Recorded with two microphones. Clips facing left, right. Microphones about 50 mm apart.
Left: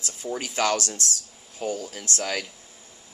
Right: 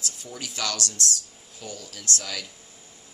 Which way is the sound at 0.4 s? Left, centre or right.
Left.